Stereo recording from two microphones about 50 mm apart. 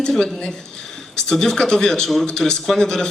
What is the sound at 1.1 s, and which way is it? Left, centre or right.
A man's voice, centre.